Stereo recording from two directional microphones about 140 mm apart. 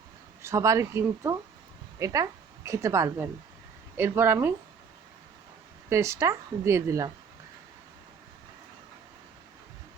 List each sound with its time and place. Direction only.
0.4 s a woman's voice: 20° right (ahead or behind)
5.9 s speech: 20° right (ahead or behind)